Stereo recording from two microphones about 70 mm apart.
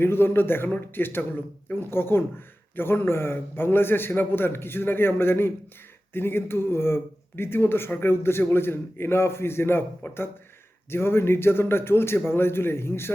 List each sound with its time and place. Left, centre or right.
0.0 s a man's voice: left